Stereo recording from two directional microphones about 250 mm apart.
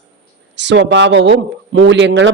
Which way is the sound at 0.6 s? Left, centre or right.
Right.